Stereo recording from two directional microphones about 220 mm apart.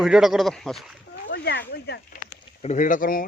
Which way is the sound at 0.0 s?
Centre (ahead or behind).